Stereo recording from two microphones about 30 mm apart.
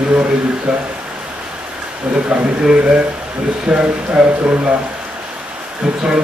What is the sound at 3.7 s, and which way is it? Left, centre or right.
Speech, right.